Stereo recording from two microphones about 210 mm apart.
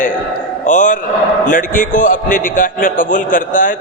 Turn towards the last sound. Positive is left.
turn(degrees=40)  # may be behind; listen again after turning